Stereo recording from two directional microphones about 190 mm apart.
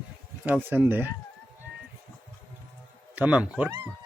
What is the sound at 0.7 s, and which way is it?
Speech, 10° right (ahead or behind).